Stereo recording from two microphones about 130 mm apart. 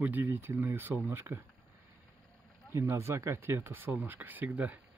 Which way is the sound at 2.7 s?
20° right (ahead or behind).